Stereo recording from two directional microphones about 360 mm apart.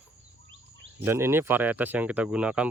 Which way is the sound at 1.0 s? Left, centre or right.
Centre.